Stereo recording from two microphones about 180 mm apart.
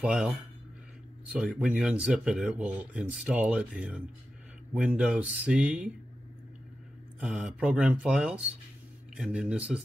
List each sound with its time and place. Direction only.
0.0 s speech: 5° right (ahead or behind)
7.2 s speech: 5° right (ahead or behind)